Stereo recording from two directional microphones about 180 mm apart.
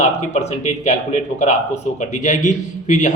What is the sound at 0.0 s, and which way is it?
A man's voice, 40° left (ahead or behind).